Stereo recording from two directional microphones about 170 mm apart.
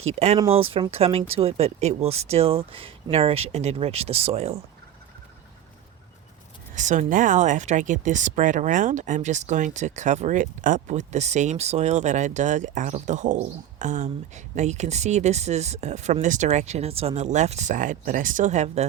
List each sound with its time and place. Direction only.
0.0 s speech: 40° right (ahead or behind)
6.7 s speech: 45° right (ahead or behind)